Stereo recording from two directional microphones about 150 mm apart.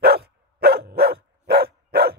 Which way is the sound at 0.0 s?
90° right.